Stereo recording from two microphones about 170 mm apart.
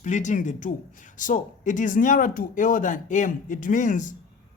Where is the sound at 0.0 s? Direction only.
45° left (ahead or behind).